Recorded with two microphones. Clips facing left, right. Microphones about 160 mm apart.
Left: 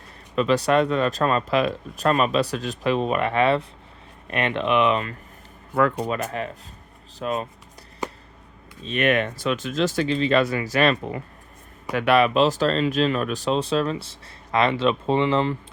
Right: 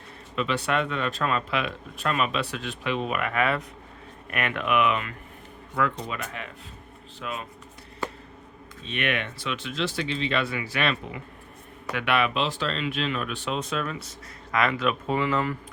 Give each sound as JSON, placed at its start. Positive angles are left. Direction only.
{"t": 0.3, "sound": "speech", "side_deg": 40}
{"t": 5.7, "sound": "speech", "side_deg": 45}
{"t": 8.8, "sound": "speech", "side_deg": 40}